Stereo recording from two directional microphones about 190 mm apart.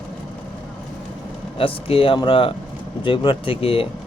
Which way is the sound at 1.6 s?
30° left (ahead or behind).